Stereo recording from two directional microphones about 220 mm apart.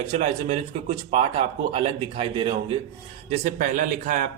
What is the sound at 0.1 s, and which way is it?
A man's voice, 30° right (ahead or behind).